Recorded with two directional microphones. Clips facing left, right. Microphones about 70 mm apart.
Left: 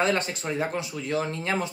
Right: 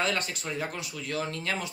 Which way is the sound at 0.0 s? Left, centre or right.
Left.